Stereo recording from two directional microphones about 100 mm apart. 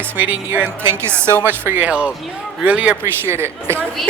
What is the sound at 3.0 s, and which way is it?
Speech, 25° right (ahead or behind).